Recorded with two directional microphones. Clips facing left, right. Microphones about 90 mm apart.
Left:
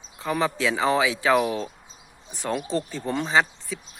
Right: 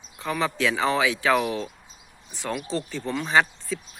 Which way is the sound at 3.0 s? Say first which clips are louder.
Left 2 dB; 35° left (ahead or behind).